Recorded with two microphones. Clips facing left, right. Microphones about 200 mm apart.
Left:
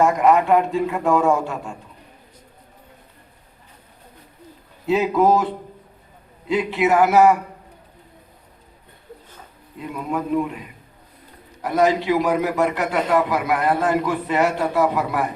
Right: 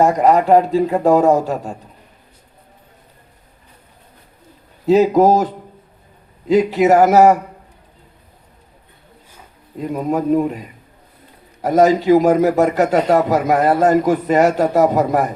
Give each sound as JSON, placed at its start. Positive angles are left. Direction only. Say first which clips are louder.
{"t": 0.0, "sound": "a man's voice", "louder": "right 3 dB", "side_deg": -35}
{"t": 4.9, "sound": "a man's voice", "louder": "right 6 dB", "side_deg": -40}
{"t": 6.5, "sound": "a man's voice", "louder": "right 6 dB", "side_deg": -40}
{"t": 9.7, "sound": "a man's voice", "louder": "right 6 dB", "side_deg": -40}